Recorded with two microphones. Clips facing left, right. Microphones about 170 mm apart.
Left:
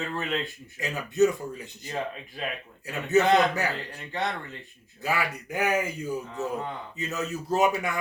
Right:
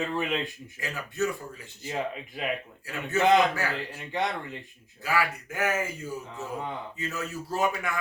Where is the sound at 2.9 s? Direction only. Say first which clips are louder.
Left 1 dB; 20° left (ahead or behind).